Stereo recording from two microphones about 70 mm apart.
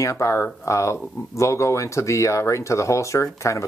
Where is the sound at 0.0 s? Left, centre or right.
Left.